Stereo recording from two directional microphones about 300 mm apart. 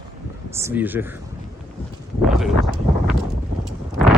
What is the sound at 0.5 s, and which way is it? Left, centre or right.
Speech, centre.